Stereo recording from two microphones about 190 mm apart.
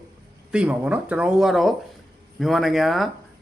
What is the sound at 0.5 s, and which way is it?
Speech, 5° right (ahead or behind).